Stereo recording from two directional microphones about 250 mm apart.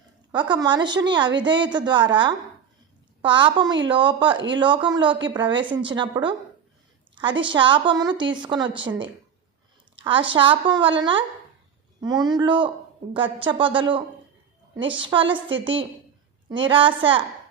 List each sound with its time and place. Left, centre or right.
0.3 s a woman's voice: centre
15.0 s a woman's voice: centre